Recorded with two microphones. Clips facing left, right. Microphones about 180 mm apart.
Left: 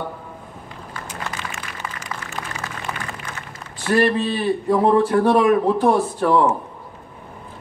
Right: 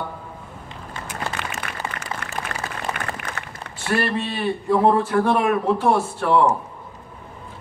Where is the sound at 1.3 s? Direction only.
30° right (ahead or behind).